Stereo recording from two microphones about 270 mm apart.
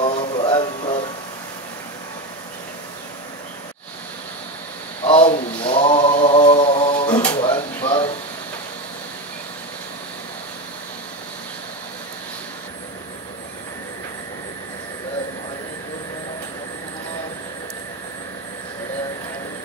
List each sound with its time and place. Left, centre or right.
0.0 s music: left
5.0 s mantra: centre
7.3 s a sound: centre